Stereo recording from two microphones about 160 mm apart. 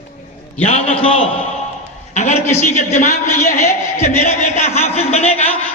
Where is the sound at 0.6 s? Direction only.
45° left (ahead or behind).